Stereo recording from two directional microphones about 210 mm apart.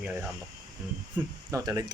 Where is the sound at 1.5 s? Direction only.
15° right (ahead or behind).